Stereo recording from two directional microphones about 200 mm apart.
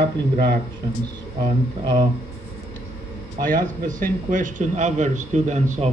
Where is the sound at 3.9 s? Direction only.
40° right (ahead or behind).